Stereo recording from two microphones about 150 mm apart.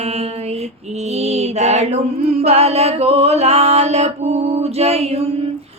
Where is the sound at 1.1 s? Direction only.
45° right (ahead or behind).